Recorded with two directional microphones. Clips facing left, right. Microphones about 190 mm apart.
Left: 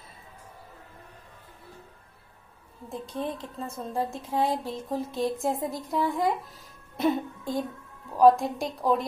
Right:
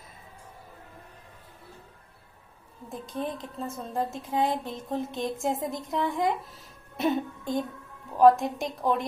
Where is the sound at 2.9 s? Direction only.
Centre (ahead or behind).